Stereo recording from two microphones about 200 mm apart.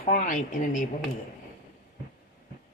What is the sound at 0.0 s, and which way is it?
Speech, 40° left (ahead or behind).